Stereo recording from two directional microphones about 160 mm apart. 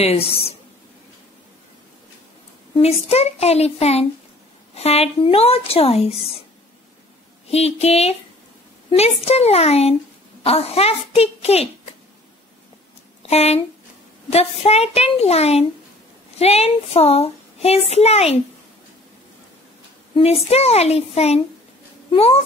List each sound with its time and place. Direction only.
0.0 s a child's voice: 40° left (ahead or behind)
2.7 s a child's voice: 40° left (ahead or behind)
7.5 s a child's voice: 40° left (ahead or behind)
13.3 s a child's voice: 40° left (ahead or behind)
20.4 s a child's voice: 40° left (ahead or behind)